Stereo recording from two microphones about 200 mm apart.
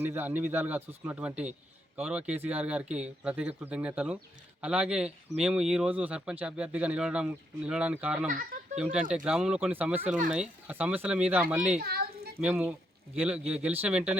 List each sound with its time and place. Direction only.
0.0 s speech: 10° right (ahead or behind)
8.3 s speech: 40° right (ahead or behind)
8.8 s speech: 5° right (ahead or behind)
11.8 s children playing: 50° right (ahead or behind)
12.4 s speech: 5° right (ahead or behind)